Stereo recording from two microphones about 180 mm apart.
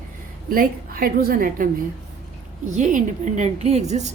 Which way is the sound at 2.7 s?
45° right (ahead or behind).